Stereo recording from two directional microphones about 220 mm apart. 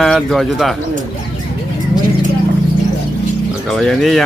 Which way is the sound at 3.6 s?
Centre (ahead or behind).